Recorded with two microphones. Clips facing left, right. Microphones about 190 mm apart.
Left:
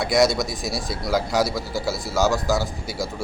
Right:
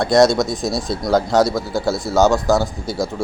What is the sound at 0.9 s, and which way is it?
Speech, 5° left (ahead or behind).